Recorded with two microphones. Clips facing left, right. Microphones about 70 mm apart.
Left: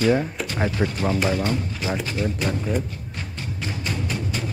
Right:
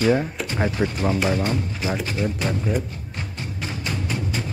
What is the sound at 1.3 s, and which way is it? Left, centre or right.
Speech, right.